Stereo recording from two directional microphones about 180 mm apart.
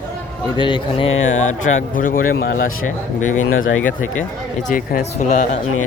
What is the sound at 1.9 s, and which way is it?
Speech, 50° left (ahead or behind).